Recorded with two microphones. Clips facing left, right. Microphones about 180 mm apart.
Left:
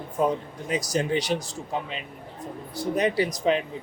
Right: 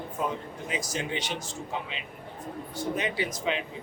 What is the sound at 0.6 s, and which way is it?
Speech, 40° left (ahead or behind).